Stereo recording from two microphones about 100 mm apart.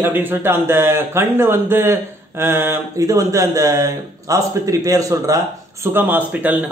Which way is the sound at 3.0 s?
35° right (ahead or behind).